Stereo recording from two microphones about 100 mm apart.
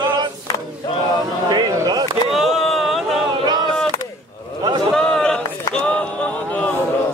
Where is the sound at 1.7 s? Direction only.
40° right (ahead or behind).